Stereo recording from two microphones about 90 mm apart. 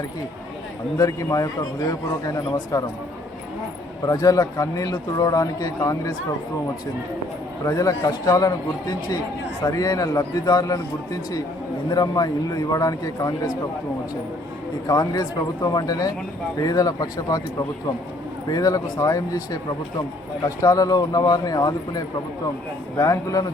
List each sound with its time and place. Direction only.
0.9 s a man's voice: 40° left (ahead or behind)
2.7 s a man's voice: 40° left (ahead or behind)
4.0 s a man's voice: 40° left (ahead or behind)
7.6 s a man's voice: 40° left (ahead or behind)
14.8 s a man's voice: 45° left (ahead or behind)
18.4 s a man's voice: 45° left (ahead or behind)
20.6 s a man's voice: 40° left (ahead or behind)
23.0 s a man's voice: 40° left (ahead or behind)